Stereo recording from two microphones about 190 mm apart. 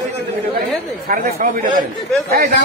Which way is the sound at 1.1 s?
45° right (ahead or behind).